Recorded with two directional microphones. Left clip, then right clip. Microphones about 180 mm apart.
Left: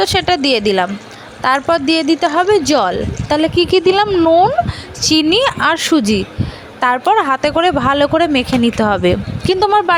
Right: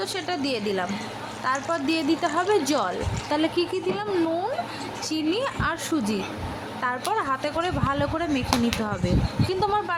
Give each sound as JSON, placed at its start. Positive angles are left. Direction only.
{"t": 0.0, "sound": "speech", "side_deg": 50}
{"t": 4.1, "sound": "speech", "side_deg": 35}
{"t": 4.9, "sound": "speech", "side_deg": 55}